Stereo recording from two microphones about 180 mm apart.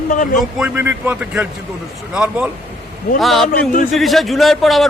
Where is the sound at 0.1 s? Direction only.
45° left (ahead or behind).